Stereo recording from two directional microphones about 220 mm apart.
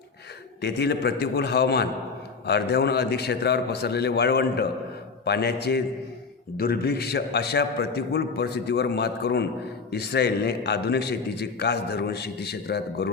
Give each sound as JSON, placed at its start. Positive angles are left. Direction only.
{"t": 0.6, "sound": "a man's voice", "side_deg": 50}